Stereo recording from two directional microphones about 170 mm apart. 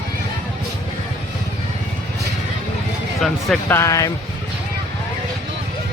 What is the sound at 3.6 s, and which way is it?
Speech, 15° left (ahead or behind).